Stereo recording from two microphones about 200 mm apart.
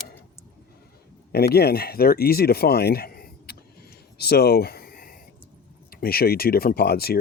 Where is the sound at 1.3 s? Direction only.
50° left (ahead or behind).